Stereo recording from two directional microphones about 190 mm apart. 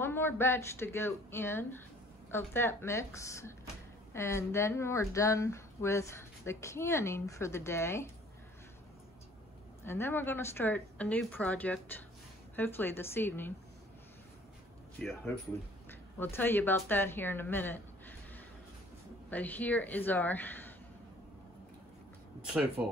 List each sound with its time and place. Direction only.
0.0 s speech: 10° left (ahead or behind)
9.8 s speech: 10° left (ahead or behind)
15.9 s speech: 10° left (ahead or behind)
22.4 s speech: 5° right (ahead or behind)